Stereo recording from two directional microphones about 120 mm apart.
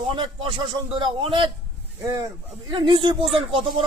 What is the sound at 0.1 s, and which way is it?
A man's voice, 50° right (ahead or behind).